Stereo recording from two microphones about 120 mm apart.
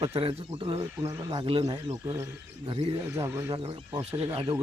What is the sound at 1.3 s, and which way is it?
Speech, 50° right (ahead or behind).